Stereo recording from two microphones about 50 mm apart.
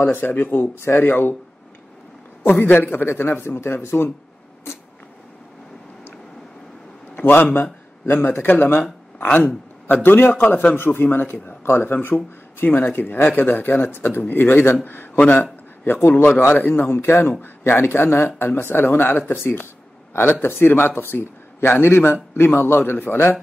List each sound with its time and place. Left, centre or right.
0.0 s a man's voice: left
2.4 s a man's voice: left
7.2 s a man's voice: left
9.2 s a man's voice: left
16.0 s a man's voice: left